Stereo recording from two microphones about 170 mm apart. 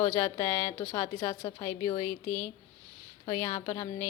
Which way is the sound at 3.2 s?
20° left (ahead or behind).